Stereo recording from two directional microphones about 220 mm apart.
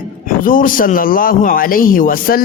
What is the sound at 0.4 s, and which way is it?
A man's voice, 40° left (ahead or behind).